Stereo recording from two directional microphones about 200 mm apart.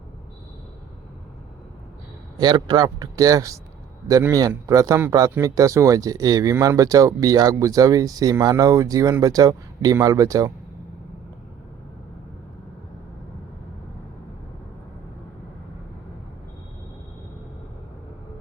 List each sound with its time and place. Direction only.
2.4 s speech: 20° right (ahead or behind)